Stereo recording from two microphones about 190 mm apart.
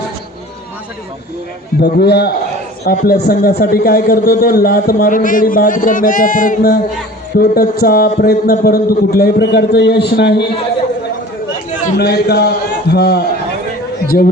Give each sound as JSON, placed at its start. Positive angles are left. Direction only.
{"t": 1.8, "sound": "a man's voice", "side_deg": 60}
{"t": 2.8, "sound": "a man's voice", "side_deg": 50}
{"t": 11.9, "sound": "a man's voice", "side_deg": 55}